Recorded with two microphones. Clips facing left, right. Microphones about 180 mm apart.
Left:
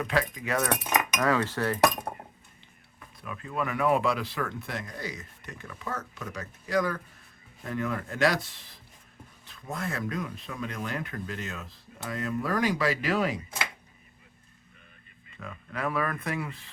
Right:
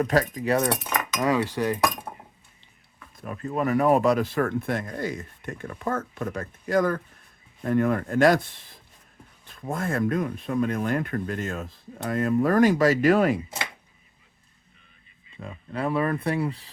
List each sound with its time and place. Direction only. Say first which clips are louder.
0.0 s speech: right 6 dB; 40° right (ahead or behind)
1.2 s cutlery: right 5 dB; 15° right (ahead or behind)
3.2 s speech: right 5 dB; 45° right (ahead or behind)
15.4 s speech: right 5 dB; 30° right (ahead or behind)